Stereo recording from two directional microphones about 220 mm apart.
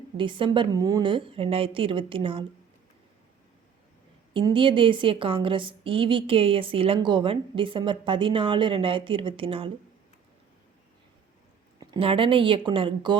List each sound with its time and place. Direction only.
0.2 s a woman's voice: 20° right (ahead or behind)
4.4 s a woman's voice: 25° right (ahead or behind)
11.8 s a woman's voice: 20° right (ahead or behind)